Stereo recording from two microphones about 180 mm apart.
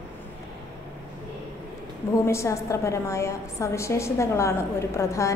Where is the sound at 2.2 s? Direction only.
15° left (ahead or behind).